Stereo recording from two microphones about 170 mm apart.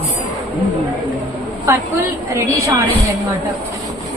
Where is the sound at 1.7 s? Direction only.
15° right (ahead or behind).